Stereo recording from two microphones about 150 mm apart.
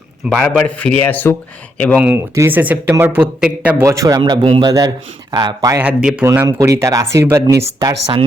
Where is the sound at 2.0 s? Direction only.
15° right (ahead or behind).